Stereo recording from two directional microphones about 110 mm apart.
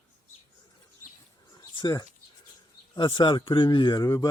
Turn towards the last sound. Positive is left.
turn(degrees=35)  # may be behind; listen again after turning